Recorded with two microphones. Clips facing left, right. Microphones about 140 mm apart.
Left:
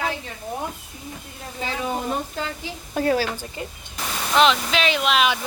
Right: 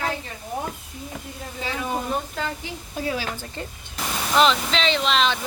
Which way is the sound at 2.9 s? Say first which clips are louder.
Left 7 dB; 55° left (ahead or behind).